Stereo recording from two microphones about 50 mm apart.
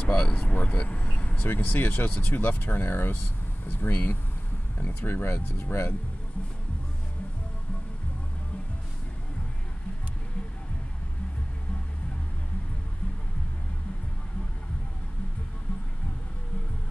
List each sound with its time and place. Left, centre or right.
0.0 s speech: left
1.5 s speech: left